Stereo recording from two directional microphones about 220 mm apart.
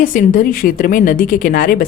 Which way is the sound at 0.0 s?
40° left (ahead or behind).